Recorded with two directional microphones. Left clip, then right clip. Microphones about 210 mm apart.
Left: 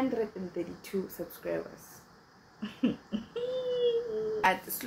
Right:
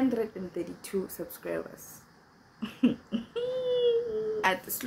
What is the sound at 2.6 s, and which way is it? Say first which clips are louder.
Laughter: right 4 dB; 15° right (ahead or behind).